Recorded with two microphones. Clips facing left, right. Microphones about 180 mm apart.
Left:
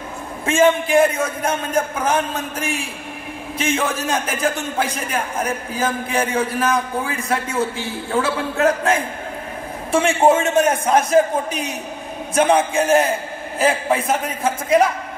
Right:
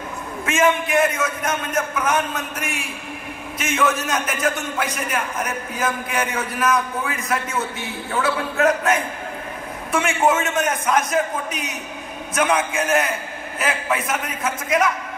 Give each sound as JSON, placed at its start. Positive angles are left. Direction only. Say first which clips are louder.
{"t": 0.5, "sound": "a man's voice", "louder": "left 4 dB", "side_deg": 30}